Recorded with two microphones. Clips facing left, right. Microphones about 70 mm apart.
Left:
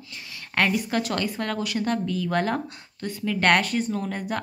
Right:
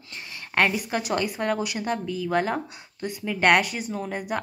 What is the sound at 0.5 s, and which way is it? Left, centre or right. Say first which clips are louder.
A woman's voice: even; centre.